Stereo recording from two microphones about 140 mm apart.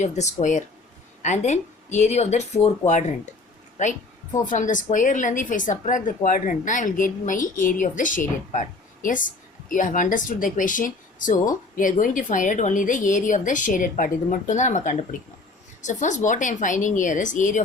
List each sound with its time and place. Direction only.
0.0 s a woman's voice: 60° left (ahead or behind)